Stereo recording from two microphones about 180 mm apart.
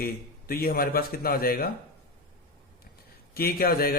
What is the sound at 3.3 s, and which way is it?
Speech, 55° left (ahead or behind).